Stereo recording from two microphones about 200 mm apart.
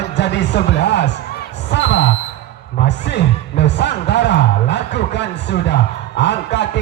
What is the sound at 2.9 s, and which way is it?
Music, 60° left (ahead or behind).